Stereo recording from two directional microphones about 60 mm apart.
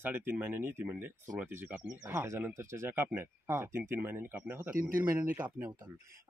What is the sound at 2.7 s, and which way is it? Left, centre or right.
Speech, right.